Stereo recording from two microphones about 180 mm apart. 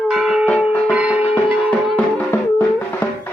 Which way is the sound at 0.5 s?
5° right (ahead or behind).